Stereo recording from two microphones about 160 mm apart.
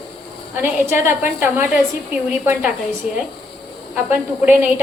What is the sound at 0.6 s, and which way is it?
Speech, 15° right (ahead or behind).